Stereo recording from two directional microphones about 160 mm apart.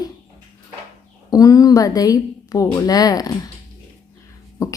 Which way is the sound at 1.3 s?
20° left (ahead or behind).